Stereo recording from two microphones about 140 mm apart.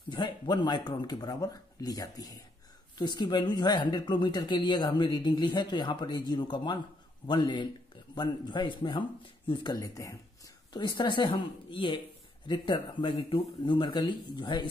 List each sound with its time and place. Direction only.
0.1 s speech: 30° left (ahead or behind)